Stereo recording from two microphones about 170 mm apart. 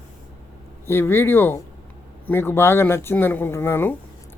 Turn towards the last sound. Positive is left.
turn(degrees=15)  # may be behind; listen again after turning